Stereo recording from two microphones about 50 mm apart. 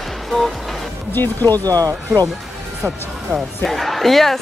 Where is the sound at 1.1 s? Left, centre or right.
Left.